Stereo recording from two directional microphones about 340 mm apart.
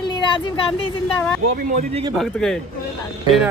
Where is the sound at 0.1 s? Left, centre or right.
Centre.